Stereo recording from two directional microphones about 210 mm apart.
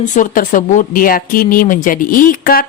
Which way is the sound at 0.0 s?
35° left (ahead or behind).